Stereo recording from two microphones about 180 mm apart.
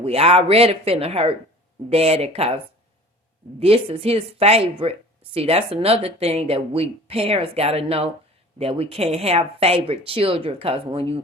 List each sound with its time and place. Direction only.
0.0 s speech: 35° right (ahead or behind)
3.6 s speech: 30° right (ahead or behind)